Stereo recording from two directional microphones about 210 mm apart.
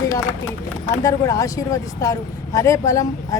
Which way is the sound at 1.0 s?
15° left (ahead or behind).